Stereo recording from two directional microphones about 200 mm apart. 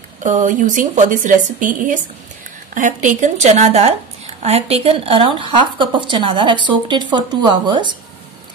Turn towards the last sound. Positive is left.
turn(degrees=-25)  # may be behind; listen again after turning